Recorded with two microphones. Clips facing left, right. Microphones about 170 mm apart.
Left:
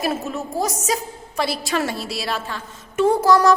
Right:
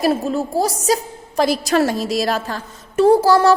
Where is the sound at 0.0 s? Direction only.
30° right (ahead or behind).